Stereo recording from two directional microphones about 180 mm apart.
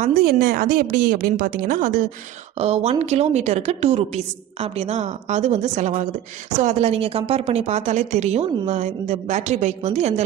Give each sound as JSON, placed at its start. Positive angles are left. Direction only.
{"t": 0.1, "sound": "a woman's voice", "side_deg": -60}
{"t": 2.6, "sound": "speech", "side_deg": -35}